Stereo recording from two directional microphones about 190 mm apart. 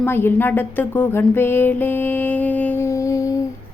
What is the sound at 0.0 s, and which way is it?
A woman's voice, 10° left (ahead or behind).